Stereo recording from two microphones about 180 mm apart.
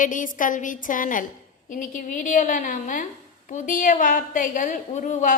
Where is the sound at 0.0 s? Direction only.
45° left (ahead or behind).